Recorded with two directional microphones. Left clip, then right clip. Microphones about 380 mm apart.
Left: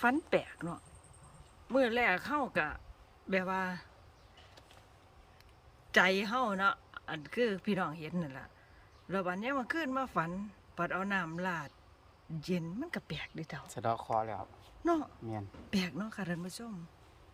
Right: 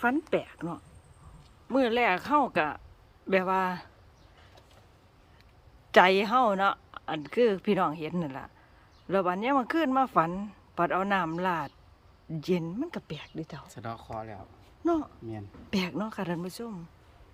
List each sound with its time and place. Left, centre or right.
0.0 s speech: centre
5.9 s speech: centre
13.7 s speech: centre
14.8 s speech: centre